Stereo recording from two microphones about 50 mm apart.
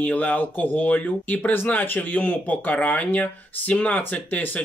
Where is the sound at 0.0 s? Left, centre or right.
Left.